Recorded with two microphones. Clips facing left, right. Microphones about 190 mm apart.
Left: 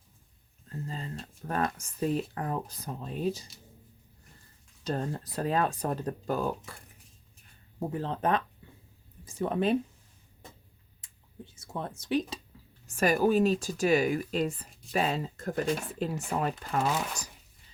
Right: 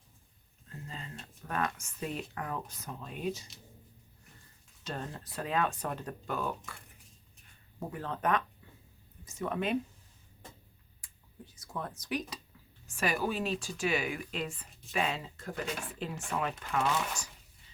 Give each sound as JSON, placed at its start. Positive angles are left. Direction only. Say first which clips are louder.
{"t": 0.7, "sound": "speech", "louder": "left 7 dB", "side_deg": 35}
{"t": 4.8, "sound": "speech", "louder": "left 8 dB", "side_deg": 40}
{"t": 7.8, "sound": "speech", "louder": "left 5 dB", "side_deg": 30}
{"t": 11.0, "sound": "speech", "louder": "left 5 dB", "side_deg": 25}
{"t": 12.9, "sound": "speech", "louder": "left 8 dB", "side_deg": 40}